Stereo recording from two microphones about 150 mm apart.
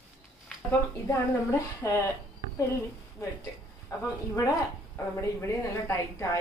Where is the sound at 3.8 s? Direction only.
20° left (ahead or behind).